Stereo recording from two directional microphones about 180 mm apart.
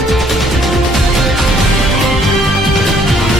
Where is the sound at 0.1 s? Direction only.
Centre (ahead or behind).